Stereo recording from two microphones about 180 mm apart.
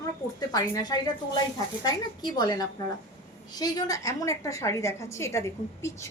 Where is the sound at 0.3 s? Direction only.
20° left (ahead or behind).